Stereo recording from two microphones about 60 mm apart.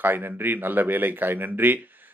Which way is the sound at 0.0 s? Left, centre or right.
Right.